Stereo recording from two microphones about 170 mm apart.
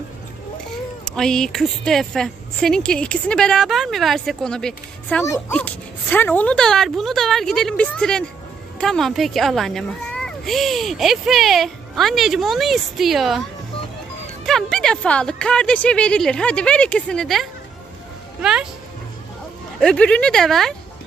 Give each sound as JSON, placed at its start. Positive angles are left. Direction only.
{"t": 1.0, "sound": "speech", "side_deg": 5}
{"t": 5.2, "sound": "a child's voice", "side_deg": 15}
{"t": 14.4, "sound": "speech", "side_deg": 5}
{"t": 18.4, "sound": "speech", "side_deg": -5}
{"t": 19.8, "sound": "speech", "side_deg": 5}